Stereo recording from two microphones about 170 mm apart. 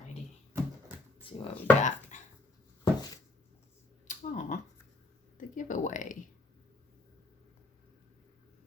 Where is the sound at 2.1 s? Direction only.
45° left (ahead or behind).